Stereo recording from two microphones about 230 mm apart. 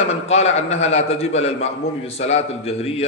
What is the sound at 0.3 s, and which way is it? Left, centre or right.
A man's voice, left.